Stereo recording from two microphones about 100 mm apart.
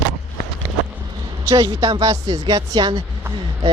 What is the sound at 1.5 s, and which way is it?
A man's voice, 35° right (ahead or behind).